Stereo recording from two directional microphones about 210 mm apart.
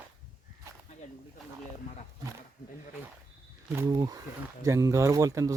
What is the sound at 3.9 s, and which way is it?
Speech, 20° right (ahead or behind).